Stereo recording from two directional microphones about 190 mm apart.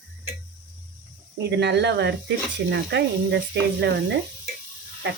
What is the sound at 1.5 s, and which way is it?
Speech, 65° right (ahead or behind).